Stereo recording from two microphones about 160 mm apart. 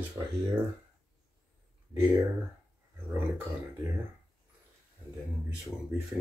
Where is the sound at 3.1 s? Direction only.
15° right (ahead or behind).